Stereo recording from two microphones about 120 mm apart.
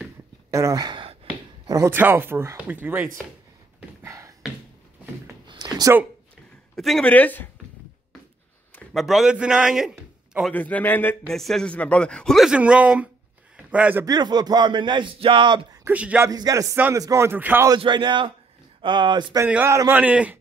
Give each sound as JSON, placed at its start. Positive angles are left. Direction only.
{"t": 0.5, "sound": "speech", "side_deg": -25}
{"t": 1.7, "sound": "speech", "side_deg": -25}
{"t": 4.0, "sound": "a sound", "side_deg": -25}
{"t": 5.5, "sound": "a sound", "side_deg": -35}
{"t": 6.7, "sound": "speech", "side_deg": 5}
{"t": 8.9, "sound": "a man's voice", "side_deg": 0}
{"t": 10.5, "sound": "a man's voice", "side_deg": 15}
{"t": 11.2, "sound": "a man's voice", "side_deg": 5}
{"t": 12.4, "sound": "a man's voice", "side_deg": -10}
{"t": 14.0, "sound": "speech", "side_deg": -35}
{"t": 15.9, "sound": "speech", "side_deg": -10}
{"t": 16.3, "sound": "speech", "side_deg": -30}
{"t": 17.7, "sound": "speech", "side_deg": -40}
{"t": 19.4, "sound": "speech", "side_deg": -15}